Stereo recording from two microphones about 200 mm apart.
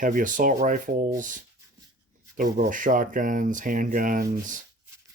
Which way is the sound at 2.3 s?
40° right (ahead or behind).